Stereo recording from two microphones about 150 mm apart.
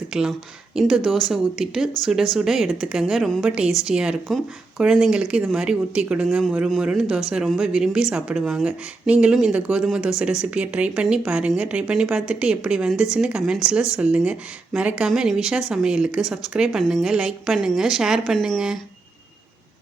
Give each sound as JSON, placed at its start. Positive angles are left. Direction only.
{"t": 0.1, "sound": "speech", "side_deg": -5}